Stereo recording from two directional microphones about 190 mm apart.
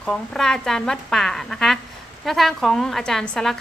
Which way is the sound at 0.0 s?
5° left (ahead or behind).